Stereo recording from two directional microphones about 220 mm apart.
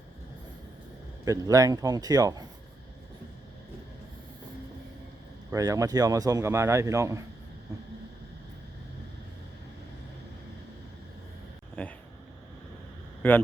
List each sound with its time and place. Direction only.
1.2 s a man's voice: 15° right (ahead or behind)
5.5 s a man's voice: 15° right (ahead or behind)
7.7 s vehicle: 15° right (ahead or behind)
11.8 s a sound: 5° left (ahead or behind)
13.2 s speech: 10° left (ahead or behind)